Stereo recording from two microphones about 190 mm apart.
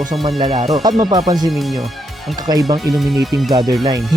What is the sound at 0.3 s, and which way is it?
Speech, 30° right (ahead or behind).